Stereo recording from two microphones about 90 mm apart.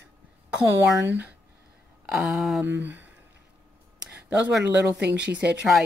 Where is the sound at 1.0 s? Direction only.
20° right (ahead or behind).